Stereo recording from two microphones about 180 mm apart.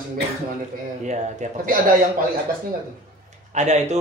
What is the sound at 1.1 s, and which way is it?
Speech, 40° right (ahead or behind).